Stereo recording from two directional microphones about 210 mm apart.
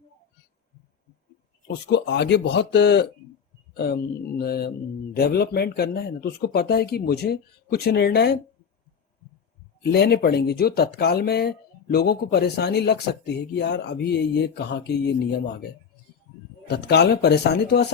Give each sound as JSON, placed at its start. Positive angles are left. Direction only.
{"t": 1.6, "sound": "speech", "side_deg": 55}
{"t": 9.9, "sound": "speech", "side_deg": 50}
{"t": 16.6, "sound": "speech", "side_deg": 50}